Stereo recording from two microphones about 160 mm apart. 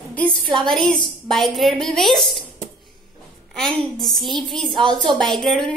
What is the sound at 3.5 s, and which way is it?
A woman's voice, centre (ahead or behind).